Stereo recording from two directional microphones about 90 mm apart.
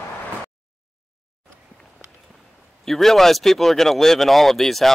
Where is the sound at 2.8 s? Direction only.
5° left (ahead or behind).